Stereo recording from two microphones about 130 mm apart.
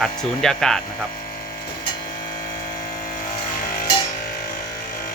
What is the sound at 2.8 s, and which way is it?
Vehicle, 90° left.